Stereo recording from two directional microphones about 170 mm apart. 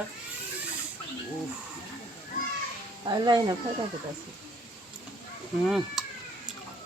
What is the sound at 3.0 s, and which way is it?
Speech, 25° right (ahead or behind).